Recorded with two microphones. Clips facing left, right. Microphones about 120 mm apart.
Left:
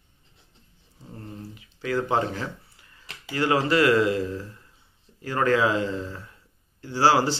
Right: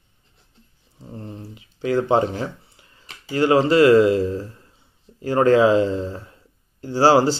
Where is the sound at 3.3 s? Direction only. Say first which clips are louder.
Right 6 dB; 25° right (ahead or behind).